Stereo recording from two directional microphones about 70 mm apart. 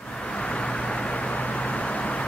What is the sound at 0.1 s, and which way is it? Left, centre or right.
Vehicle, centre.